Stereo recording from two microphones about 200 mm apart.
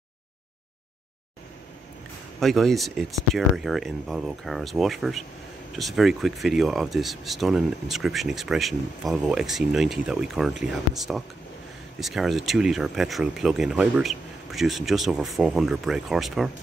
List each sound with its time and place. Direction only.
2.4 s speech: centre (ahead or behind)